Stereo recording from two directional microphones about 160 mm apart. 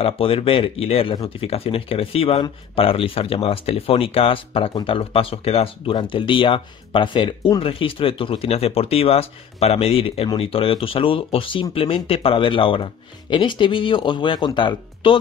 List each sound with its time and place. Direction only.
0.0 s speech: 35° left (ahead or behind)